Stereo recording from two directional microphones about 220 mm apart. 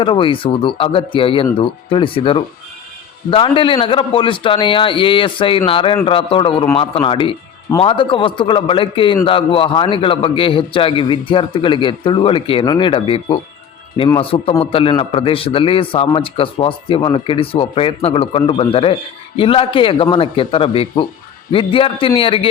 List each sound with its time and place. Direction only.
0.0 s a man's voice: 25° left (ahead or behind)